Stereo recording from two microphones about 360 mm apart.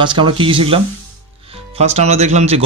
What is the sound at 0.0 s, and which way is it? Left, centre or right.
Speech, centre.